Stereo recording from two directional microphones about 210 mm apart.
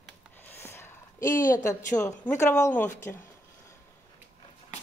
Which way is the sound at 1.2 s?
40° left (ahead or behind).